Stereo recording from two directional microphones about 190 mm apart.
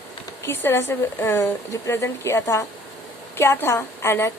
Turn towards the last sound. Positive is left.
turn(degrees=15)  # may be behind; listen again after turning